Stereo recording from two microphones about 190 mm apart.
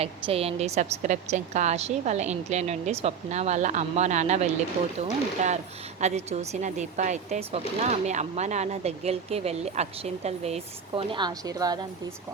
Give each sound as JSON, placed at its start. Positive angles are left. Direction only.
{"t": 0.0, "sound": "speech", "side_deg": -30}